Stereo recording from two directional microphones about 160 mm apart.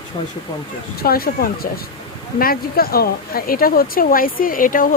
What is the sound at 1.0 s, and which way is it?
Speech, 70° left (ahead or behind).